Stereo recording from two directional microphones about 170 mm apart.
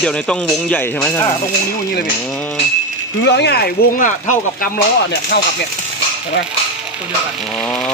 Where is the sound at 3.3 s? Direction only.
80° left.